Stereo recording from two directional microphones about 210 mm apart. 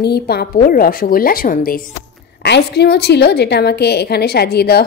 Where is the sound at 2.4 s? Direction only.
55° left (ahead or behind).